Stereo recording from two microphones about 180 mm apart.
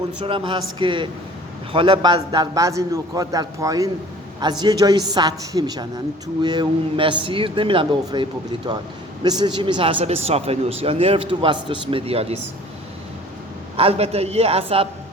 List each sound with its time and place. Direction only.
0.3 s speech: 30° right (ahead or behind)
13.7 s speech: 35° right (ahead or behind)